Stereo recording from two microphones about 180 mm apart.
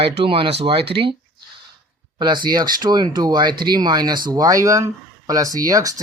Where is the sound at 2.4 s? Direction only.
25° right (ahead or behind).